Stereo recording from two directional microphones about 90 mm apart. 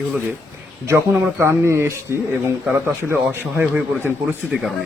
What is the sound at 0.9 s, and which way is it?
Speech, 25° right (ahead or behind).